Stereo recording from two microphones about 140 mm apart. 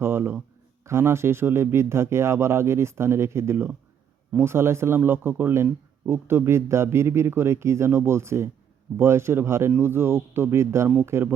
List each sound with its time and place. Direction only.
0.0 s a man's voice: 15° right (ahead or behind)